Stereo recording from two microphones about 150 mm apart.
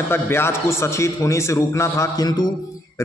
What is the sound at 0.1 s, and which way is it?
A man's voice, 15° left (ahead or behind).